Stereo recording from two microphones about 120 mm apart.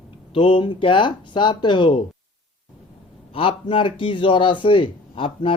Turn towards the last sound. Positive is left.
turn(degrees=50)  # may be behind; listen again after turning